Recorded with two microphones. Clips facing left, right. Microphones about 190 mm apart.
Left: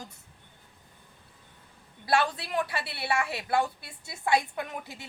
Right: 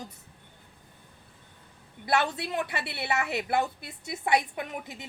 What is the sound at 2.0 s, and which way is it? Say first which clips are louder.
A woman's voice: even; 20° right (ahead or behind).